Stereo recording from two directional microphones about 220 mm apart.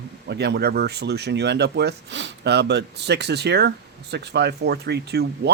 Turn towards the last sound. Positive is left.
turn(degrees=-50)  # may be behind; listen again after turning